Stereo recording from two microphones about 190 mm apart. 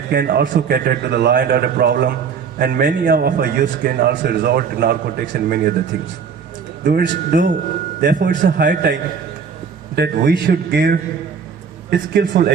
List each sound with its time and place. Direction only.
0.1 s a man's voice: 55° right (ahead or behind)
7.3 s a man's voice: 55° right (ahead or behind)